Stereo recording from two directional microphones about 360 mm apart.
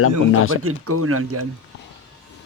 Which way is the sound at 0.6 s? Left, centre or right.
Right.